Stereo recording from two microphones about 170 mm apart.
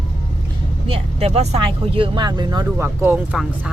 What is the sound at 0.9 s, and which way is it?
Speech, 35° right (ahead or behind).